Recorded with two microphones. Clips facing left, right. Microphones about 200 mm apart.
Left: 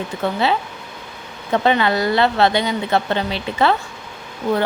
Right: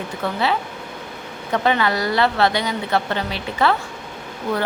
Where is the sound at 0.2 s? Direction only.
25° left (ahead or behind).